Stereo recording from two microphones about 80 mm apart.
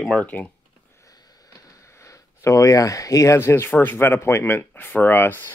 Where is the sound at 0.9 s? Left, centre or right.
Left.